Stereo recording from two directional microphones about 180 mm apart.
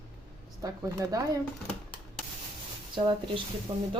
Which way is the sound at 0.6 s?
20° right (ahead or behind).